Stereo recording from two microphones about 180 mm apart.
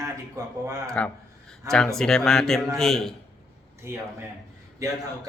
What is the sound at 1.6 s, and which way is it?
Speech, 15° right (ahead or behind).